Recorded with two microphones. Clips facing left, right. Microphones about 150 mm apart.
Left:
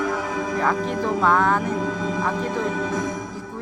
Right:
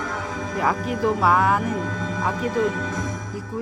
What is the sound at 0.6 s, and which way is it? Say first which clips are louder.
Speech: right 1 dB; 5° right (ahead or behind).